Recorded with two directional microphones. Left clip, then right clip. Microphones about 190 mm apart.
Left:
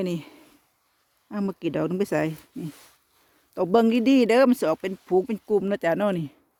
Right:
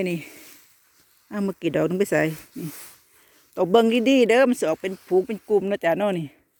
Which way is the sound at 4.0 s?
10° left (ahead or behind).